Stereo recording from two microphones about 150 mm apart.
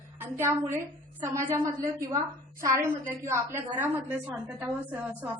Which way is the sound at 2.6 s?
20° right (ahead or behind).